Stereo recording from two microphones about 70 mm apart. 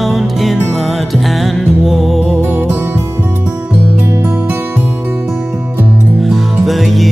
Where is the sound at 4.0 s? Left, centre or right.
Right.